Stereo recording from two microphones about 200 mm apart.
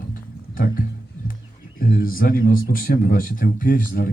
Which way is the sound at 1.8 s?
45° left (ahead or behind).